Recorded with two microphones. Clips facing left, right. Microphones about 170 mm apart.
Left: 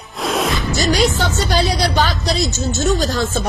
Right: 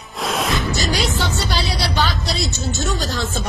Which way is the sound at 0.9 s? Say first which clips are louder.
Left 5 dB; 45° left (ahead or behind).